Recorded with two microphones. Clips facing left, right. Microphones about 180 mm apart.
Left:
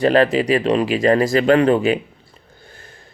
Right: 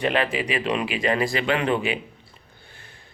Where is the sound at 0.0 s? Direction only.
40° left (ahead or behind).